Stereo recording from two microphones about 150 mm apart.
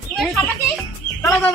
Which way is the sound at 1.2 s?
10° left (ahead or behind).